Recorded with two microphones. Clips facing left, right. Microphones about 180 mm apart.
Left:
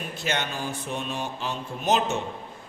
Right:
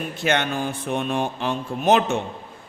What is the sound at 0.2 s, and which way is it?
A man's voice, 60° right (ahead or behind).